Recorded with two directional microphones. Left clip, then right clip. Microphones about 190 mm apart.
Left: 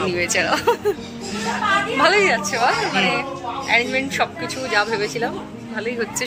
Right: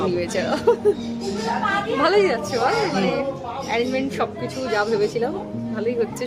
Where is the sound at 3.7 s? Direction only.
5° right (ahead or behind).